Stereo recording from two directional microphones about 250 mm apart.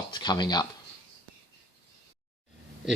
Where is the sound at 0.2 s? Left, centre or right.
Centre.